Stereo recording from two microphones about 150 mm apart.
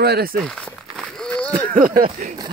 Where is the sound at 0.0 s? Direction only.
90° right.